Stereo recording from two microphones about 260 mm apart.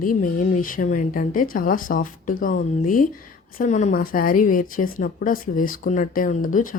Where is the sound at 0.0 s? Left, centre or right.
Left.